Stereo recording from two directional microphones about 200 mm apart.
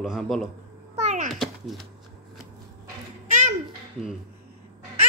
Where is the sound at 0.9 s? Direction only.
35° right (ahead or behind).